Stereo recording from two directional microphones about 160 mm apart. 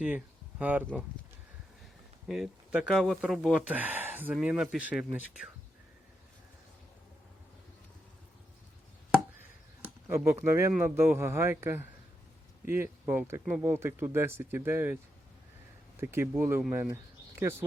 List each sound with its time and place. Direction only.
0.6 s speech: 10° right (ahead or behind)
2.2 s speech: 5° right (ahead or behind)
9.8 s speech: 15° right (ahead or behind)
16.0 s speech: 15° right (ahead or behind)